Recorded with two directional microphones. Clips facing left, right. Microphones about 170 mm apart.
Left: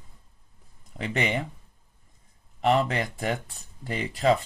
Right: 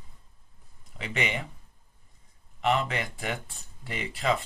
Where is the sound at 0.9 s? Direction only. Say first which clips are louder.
Left 4 dB; 40° left (ahead or behind).